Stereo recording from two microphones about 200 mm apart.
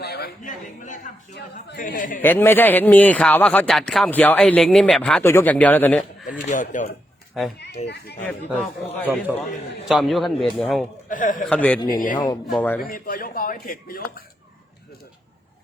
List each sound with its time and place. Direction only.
0.0 s a sound: 55° left (ahead or behind)
0.4 s a man's voice: 40° left (ahead or behind)
2.1 s speech: 10° left (ahead or behind)
6.5 s a man's voice: 40° left (ahead or behind)
7.3 s a man's voice: centre (ahead or behind)
7.9 s speech: 55° left (ahead or behind)
9.3 s a man's voice: centre (ahead or behind)
11.1 s a man's voice: 40° left (ahead or behind)
11.4 s speech: 5° left (ahead or behind)
11.9 s a man's voice: 40° left (ahead or behind)
12.1 s speech: 20° left (ahead or behind)
12.5 s speech: 10° left (ahead or behind)
12.8 s speech: 45° left (ahead or behind)